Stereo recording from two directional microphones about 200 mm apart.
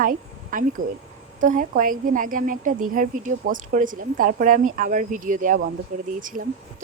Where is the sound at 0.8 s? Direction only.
40° right (ahead or behind).